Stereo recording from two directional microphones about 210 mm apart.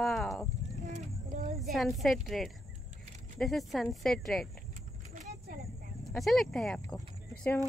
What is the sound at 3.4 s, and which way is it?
Speech, centre (ahead or behind).